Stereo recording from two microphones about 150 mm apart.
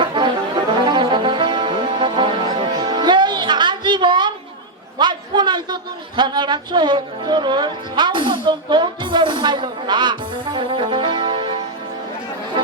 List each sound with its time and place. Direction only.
0.0 s brass instrument: 30° right (ahead or behind)
0.9 s music: 30° right (ahead or behind)
4.9 s a sound: 30° right (ahead or behind)
12.6 s music: 35° right (ahead or behind)